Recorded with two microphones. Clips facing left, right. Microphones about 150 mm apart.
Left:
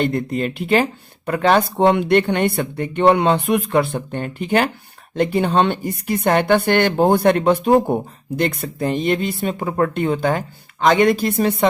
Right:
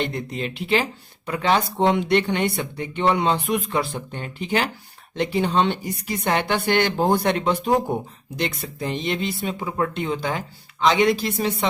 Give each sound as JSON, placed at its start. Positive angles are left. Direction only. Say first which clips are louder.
{"t": 0.0, "sound": "speech", "louder": "left 7 dB", "side_deg": 50}